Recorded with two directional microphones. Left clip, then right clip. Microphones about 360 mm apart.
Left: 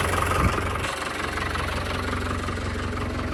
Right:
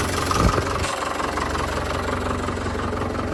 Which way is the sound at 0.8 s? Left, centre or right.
Right.